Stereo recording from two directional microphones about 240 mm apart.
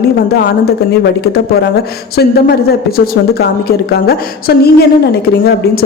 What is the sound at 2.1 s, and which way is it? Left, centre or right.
Speech, left.